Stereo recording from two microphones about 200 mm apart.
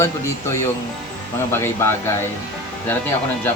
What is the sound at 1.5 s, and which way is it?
Speech, 10° left (ahead or behind).